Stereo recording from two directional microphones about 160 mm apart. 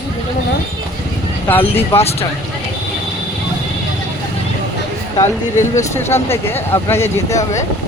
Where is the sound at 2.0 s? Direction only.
40° left (ahead or behind).